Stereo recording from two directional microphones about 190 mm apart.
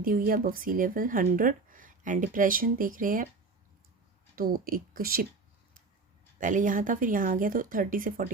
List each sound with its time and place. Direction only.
0.0 s speech: 45° right (ahead or behind)
4.4 s speech: 50° right (ahead or behind)
6.4 s speech: 40° right (ahead or behind)